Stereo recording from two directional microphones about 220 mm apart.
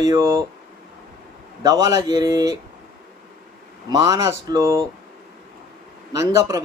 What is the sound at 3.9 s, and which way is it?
Speech, 15° right (ahead or behind).